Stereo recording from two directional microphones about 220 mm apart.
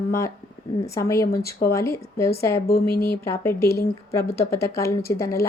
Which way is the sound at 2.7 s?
45° left (ahead or behind).